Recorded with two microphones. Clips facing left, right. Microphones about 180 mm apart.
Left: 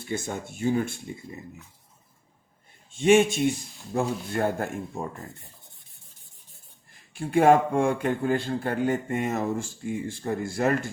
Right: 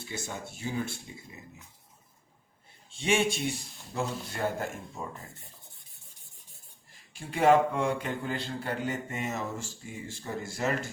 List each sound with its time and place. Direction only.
0.0 s a man's voice: 50° left (ahead or behind)
2.9 s a man's voice: 50° left (ahead or behind)
7.1 s a man's voice: 50° left (ahead or behind)